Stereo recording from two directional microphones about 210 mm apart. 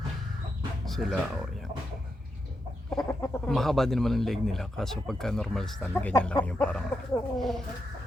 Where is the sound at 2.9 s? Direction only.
15° left (ahead or behind).